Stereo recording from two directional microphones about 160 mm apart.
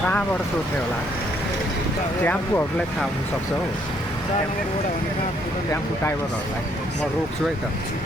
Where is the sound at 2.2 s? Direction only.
10° left (ahead or behind).